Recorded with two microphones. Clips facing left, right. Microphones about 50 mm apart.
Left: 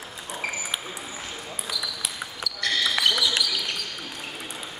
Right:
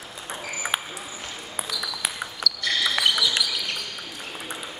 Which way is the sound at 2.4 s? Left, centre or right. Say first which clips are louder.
Right 1 dB; centre.